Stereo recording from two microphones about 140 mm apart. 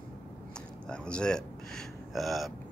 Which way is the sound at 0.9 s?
5° left (ahead or behind).